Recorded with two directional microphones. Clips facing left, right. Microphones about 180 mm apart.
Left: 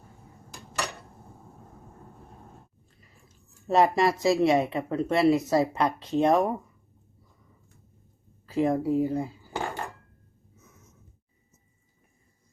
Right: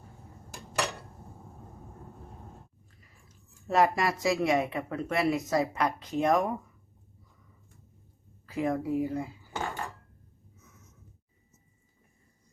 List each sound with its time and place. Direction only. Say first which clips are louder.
3.7 s speech: left 4 dB; 25° left (ahead or behind)
8.4 s speech: left 5 dB; 30° left (ahead or behind)